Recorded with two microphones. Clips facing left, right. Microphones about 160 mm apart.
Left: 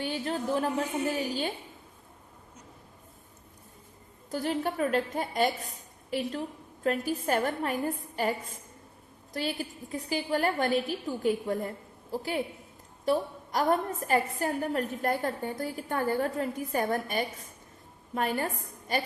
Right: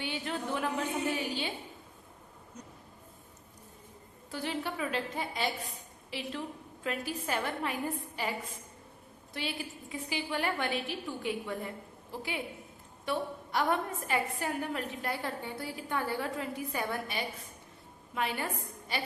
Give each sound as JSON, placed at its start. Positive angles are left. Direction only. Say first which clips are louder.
{"t": 0.0, "sound": "a woman's voice", "louder": "left 5 dB", "side_deg": 40}
{"t": 4.3, "sound": "a woman's voice", "louder": "left 6 dB", "side_deg": 45}
{"t": 9.9, "sound": "a woman's voice", "louder": "left 6 dB", "side_deg": 40}